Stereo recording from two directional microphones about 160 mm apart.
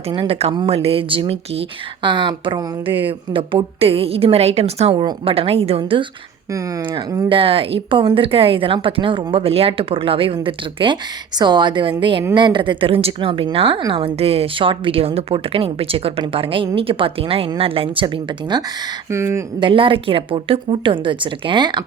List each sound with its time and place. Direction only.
0.1 s a woman's voice: 35° right (ahead or behind)
6.5 s a woman's voice: 25° right (ahead or behind)
19.1 s speech: 15° right (ahead or behind)
19.5 s a woman's voice: 30° right (ahead or behind)